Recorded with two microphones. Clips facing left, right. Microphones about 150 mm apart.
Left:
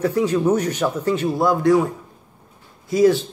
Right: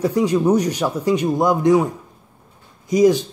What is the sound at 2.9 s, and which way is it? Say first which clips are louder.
Speech: right 1 dB; 15° right (ahead or behind).